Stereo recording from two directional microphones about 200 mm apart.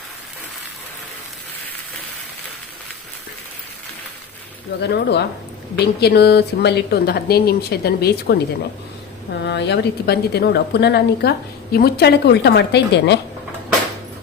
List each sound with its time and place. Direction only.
4.8 s a woman's voice: 55° left (ahead or behind)
9.4 s a woman's voice: 60° left (ahead or behind)